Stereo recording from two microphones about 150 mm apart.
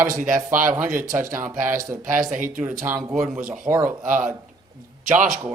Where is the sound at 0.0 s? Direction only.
65° right (ahead or behind).